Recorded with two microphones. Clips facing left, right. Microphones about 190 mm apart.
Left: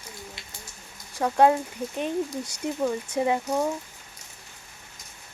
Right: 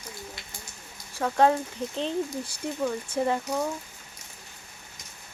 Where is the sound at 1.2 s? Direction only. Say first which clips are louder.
Left 2 dB; 10° left (ahead or behind).